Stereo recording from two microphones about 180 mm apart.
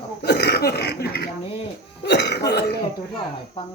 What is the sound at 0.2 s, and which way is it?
Throat clearing, 65° left (ahead or behind).